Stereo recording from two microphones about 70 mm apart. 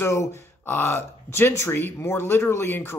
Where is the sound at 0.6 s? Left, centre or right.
Left.